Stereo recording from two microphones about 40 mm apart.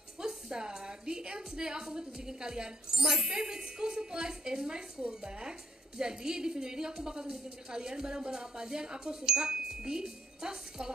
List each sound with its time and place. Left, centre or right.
0.2 s a woman's voice: centre